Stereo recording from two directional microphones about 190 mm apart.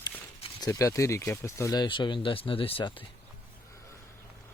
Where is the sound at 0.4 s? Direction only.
20° left (ahead or behind).